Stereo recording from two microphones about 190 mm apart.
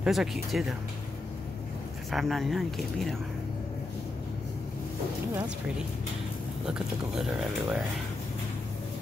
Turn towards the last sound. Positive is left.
turn(degrees=-5)  # may be behind; listen again after turning